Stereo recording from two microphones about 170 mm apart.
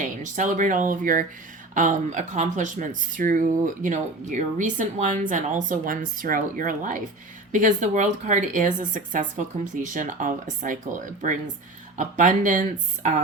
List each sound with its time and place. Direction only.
0.0 s speech: 50° right (ahead or behind)
11.9 s speech: 50° right (ahead or behind)